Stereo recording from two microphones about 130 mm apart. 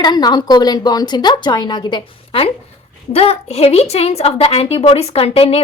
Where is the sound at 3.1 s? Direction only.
50° left (ahead or behind).